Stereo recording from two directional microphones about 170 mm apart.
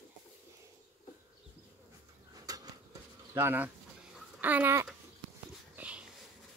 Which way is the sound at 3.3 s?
10° right (ahead or behind).